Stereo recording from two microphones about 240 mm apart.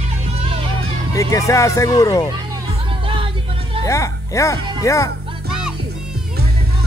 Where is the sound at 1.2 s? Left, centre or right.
Centre.